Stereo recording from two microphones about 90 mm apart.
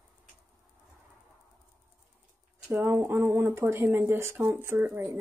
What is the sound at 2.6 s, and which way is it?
Speech, 25° right (ahead or behind).